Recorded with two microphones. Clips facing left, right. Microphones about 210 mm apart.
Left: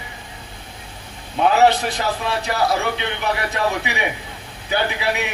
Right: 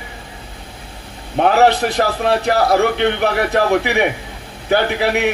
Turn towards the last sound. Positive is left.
turn(degrees=-60)  # may be behind; listen again after turning